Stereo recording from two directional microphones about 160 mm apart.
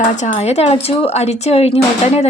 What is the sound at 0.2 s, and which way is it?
Speech, 45° left (ahead or behind).